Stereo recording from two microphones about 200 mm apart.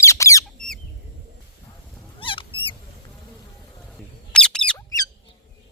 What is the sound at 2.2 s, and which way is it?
Rodents, 25° left (ahead or behind).